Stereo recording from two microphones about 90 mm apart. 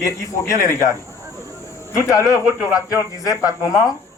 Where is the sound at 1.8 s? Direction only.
35° left (ahead or behind).